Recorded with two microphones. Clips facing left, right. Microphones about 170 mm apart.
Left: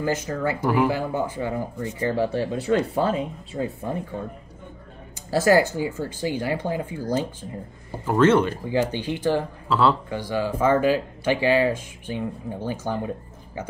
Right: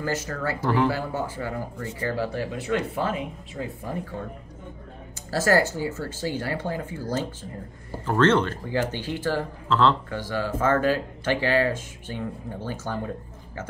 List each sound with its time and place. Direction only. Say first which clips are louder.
0.0 s speech: left 4 dB; 15° left (ahead or behind)
5.3 s speech: left 3 dB; 15° left (ahead or behind)